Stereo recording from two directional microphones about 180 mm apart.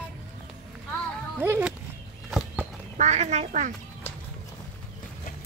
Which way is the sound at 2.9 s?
40° right (ahead or behind).